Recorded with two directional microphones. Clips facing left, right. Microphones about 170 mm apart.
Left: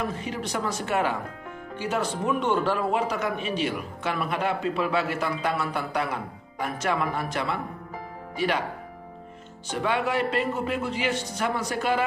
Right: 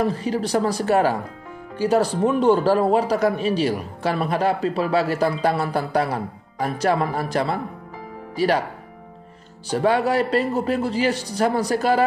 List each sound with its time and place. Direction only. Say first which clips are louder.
0.0 s speech: right 8 dB; 35° right (ahead or behind)
9.7 s speech: right 7 dB; 35° right (ahead or behind)